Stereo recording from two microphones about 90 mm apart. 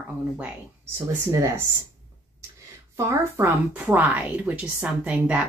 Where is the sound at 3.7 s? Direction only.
15° right (ahead or behind).